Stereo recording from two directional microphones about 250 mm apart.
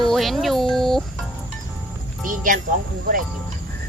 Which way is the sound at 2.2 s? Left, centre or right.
Right.